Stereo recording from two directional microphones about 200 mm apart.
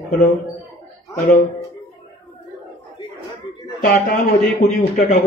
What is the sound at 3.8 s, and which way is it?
Speech, 40° left (ahead or behind).